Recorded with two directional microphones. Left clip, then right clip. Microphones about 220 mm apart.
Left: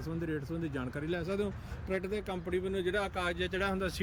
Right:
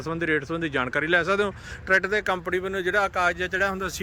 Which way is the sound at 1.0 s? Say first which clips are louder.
Right 12 dB; 5° right (ahead or behind).